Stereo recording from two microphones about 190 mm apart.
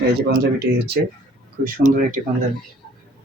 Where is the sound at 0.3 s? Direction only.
55° right (ahead or behind).